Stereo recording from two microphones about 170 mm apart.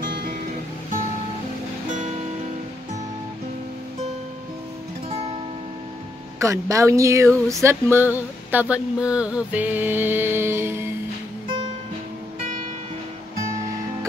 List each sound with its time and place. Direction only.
0.0 s music: 55° right (ahead or behind)
6.4 s speech: 20° right (ahead or behind)